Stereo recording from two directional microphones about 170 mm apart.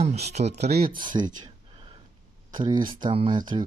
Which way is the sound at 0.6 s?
70° right (ahead or behind).